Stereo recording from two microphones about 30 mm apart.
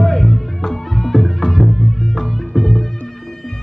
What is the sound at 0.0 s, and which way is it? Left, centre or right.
Music, centre.